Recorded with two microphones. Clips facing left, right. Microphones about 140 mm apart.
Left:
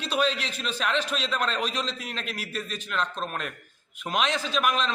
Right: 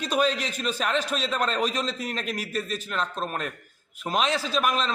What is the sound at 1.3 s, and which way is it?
A man's voice, 40° right (ahead or behind).